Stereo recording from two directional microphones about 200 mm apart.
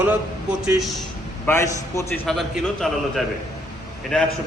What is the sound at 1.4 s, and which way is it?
Speech, 10° left (ahead or behind).